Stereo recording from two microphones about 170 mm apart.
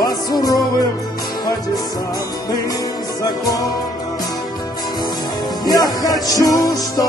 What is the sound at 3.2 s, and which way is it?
Music, 20° left (ahead or behind).